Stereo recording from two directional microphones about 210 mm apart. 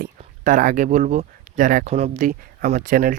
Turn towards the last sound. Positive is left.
turn(degrees=-40)  # may be behind; listen again after turning